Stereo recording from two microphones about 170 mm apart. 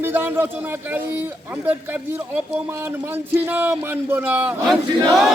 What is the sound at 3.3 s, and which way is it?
Speech, 10° right (ahead or behind).